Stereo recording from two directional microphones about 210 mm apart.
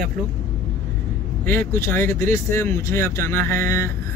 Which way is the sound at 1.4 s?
10° left (ahead or behind).